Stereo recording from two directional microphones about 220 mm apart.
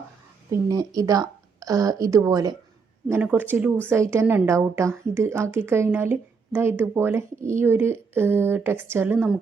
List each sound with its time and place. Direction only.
0.5 s speech: 15° right (ahead or behind)